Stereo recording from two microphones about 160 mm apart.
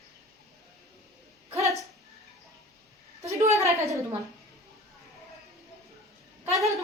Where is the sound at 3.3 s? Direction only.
20° right (ahead or behind).